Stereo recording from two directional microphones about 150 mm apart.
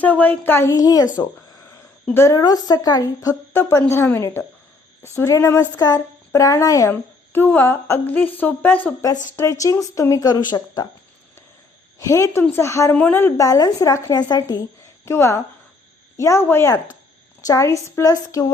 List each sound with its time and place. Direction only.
0.0 s a woman's voice: 10° left (ahead or behind)
2.1 s a woman's voice: 20° left (ahead or behind)
11.9 s a woman's voice: 20° left (ahead or behind)